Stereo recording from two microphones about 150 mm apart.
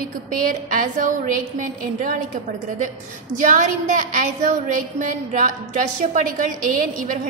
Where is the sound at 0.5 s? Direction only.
60° right (ahead or behind).